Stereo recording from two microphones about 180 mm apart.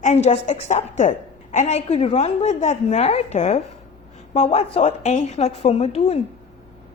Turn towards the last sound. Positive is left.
turn(degrees=35)  # may be behind; listen again after turning